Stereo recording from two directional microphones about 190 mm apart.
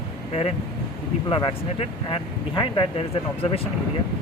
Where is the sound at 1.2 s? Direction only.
25° left (ahead or behind).